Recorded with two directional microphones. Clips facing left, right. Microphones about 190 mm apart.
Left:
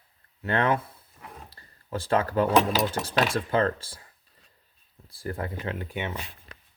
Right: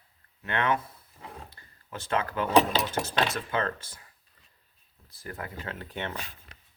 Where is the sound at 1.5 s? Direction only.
35° left (ahead or behind).